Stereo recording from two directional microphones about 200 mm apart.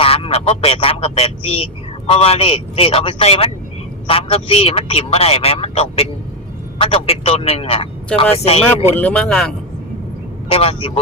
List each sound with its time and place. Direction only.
0.0 s a man's voice: 30° left (ahead or behind)
9.0 s speech: 5° left (ahead or behind)
10.5 s a man's voice: 30° left (ahead or behind)